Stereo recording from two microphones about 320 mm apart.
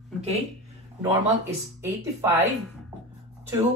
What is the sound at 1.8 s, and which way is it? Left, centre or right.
Speech, centre.